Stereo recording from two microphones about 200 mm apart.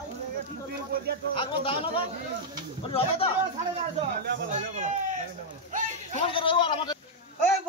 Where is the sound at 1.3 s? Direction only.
25° left (ahead or behind).